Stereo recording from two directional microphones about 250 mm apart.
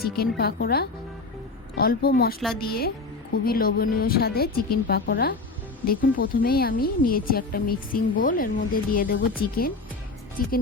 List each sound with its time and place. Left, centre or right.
0.0 s a woman's voice: left
10.4 s a woman's voice: left